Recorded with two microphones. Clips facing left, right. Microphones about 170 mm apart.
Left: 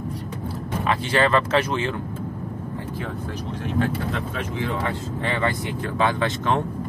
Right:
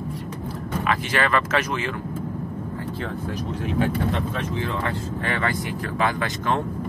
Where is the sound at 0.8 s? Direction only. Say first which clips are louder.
Left 3 dB; 30° left (ahead or behind).